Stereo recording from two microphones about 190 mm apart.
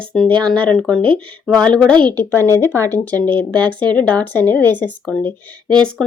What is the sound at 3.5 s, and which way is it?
Speech, 25° right (ahead or behind).